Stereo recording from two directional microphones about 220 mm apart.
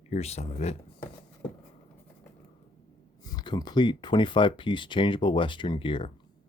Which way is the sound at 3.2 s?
20° left (ahead or behind).